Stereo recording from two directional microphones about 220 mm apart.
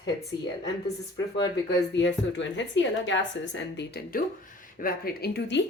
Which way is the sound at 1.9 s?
55° left (ahead or behind).